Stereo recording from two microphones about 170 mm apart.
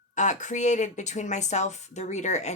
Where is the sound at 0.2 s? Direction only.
45° left (ahead or behind).